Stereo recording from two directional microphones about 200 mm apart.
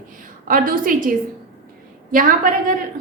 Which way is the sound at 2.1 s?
45° right (ahead or behind).